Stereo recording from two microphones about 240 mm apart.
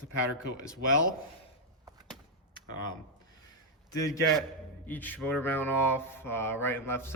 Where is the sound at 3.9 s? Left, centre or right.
Centre.